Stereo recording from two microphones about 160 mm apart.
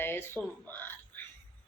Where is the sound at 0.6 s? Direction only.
10° left (ahead or behind).